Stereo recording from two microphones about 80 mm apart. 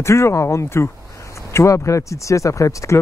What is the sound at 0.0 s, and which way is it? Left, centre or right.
Speech, left.